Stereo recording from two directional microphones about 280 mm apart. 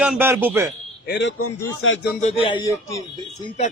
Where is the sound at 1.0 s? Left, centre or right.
Left.